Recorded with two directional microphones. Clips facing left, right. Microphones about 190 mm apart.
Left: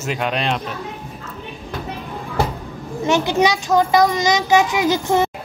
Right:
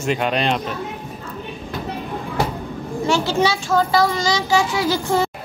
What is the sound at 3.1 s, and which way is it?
A child's voice, 20° left (ahead or behind).